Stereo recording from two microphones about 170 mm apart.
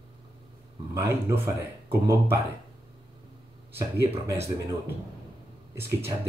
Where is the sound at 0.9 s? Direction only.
15° right (ahead or behind).